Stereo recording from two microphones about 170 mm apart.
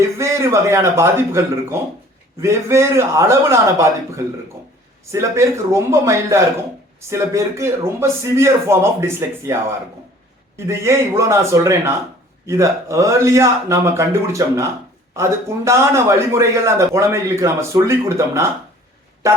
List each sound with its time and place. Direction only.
0.2 s a man's voice: 15° right (ahead or behind)
10.7 s a man's voice: 15° right (ahead or behind)